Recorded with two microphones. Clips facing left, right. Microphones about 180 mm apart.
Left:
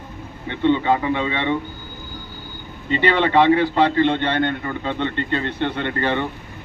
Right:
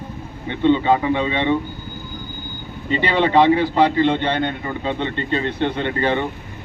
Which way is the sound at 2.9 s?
15° right (ahead or behind).